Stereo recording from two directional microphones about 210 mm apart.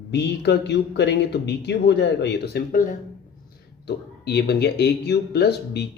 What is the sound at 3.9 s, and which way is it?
Speech, 50° left (ahead or behind).